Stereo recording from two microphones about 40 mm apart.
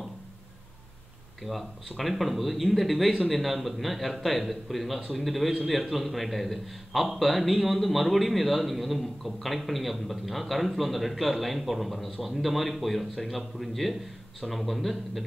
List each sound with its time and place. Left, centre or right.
1.4 s a man's voice: centre